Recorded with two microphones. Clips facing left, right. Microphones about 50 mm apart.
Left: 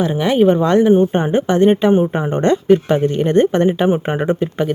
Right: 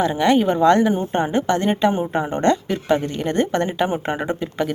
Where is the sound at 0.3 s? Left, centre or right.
Left.